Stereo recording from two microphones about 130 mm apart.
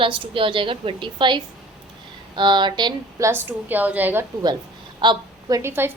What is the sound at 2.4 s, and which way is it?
Speech, 35° right (ahead or behind).